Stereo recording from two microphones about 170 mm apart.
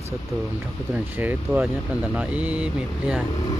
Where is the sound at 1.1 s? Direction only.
10° right (ahead or behind).